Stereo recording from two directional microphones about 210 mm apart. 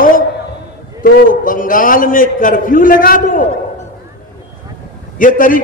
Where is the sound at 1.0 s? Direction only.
40° left (ahead or behind).